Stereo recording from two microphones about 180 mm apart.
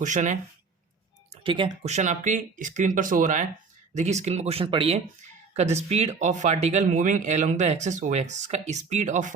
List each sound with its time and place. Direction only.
0.0 s speech: 45° right (ahead or behind)
1.3 s speech: 30° right (ahead or behind)
1.9 s speech: 40° right (ahead or behind)